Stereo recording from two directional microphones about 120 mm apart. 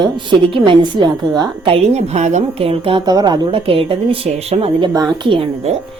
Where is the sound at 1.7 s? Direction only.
60° right (ahead or behind).